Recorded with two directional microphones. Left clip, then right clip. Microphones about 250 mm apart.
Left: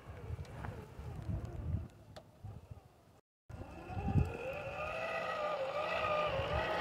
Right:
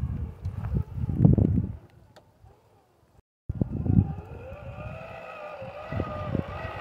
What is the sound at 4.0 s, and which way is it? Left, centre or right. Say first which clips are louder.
Vehicle: right 7 dB; left.